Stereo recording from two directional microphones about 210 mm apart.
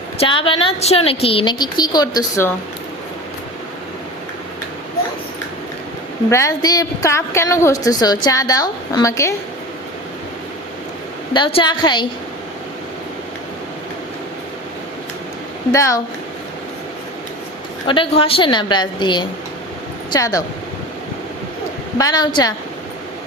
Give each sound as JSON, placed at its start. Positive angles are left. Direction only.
{"t": 0.2, "sound": "a woman's voice", "side_deg": 25}
{"t": 6.3, "sound": "a woman's voice", "side_deg": 15}
{"t": 11.3, "sound": "a woman's voice", "side_deg": 25}
{"t": 15.7, "sound": "a woman's voice", "side_deg": 15}
{"t": 17.8, "sound": "a woman's voice", "side_deg": 25}
{"t": 21.9, "sound": "a woman's voice", "side_deg": 20}